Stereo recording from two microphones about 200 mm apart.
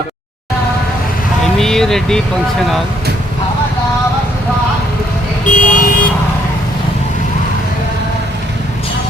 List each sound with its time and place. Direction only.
1.5 s vehicle: centre (ahead or behind)
5.5 s car alarm: 40° left (ahead or behind)